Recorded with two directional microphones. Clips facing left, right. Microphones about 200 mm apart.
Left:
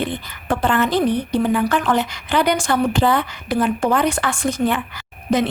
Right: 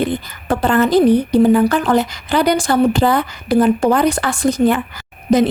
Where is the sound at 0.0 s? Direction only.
40° right (ahead or behind).